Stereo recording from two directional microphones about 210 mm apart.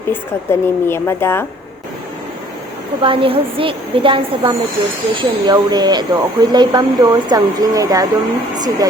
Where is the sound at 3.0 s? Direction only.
25° right (ahead or behind).